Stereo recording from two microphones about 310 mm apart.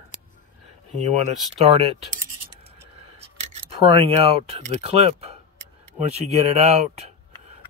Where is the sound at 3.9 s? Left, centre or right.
Centre.